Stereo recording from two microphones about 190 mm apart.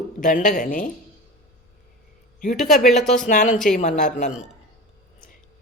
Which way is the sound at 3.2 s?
40° left (ahead or behind).